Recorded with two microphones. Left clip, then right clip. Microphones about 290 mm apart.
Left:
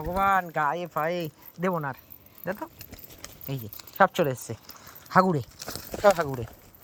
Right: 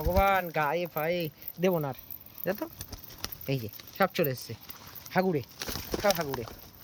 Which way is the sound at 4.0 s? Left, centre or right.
Centre.